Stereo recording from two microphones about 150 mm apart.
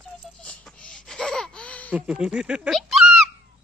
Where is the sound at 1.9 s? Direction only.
5° right (ahead or behind).